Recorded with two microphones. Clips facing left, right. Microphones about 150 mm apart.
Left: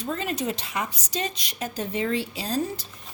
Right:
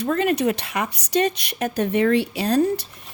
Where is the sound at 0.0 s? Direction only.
65° right (ahead or behind).